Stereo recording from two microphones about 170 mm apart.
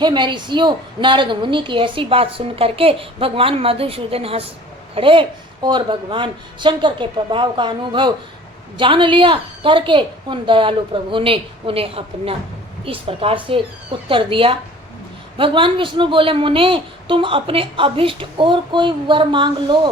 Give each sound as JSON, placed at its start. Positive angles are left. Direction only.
{"t": 0.0, "sound": "a woman's voice", "side_deg": -25}